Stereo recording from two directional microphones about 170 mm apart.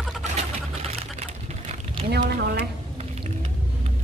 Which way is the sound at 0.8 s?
40° right (ahead or behind).